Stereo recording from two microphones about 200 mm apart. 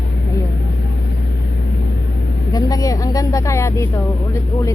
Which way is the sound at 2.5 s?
20° left (ahead or behind).